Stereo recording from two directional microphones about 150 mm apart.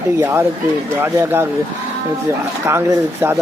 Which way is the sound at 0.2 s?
15° right (ahead or behind).